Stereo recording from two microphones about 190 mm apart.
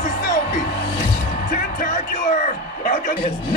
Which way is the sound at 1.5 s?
45° left (ahead or behind).